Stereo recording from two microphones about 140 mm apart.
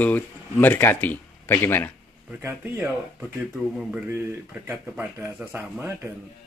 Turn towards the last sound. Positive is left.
turn(degrees=-15)  # may be behind; listen again after turning